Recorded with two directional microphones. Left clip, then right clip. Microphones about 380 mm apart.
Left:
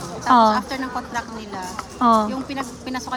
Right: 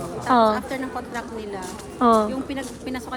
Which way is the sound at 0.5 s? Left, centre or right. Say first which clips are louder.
Left 3 dB; centre.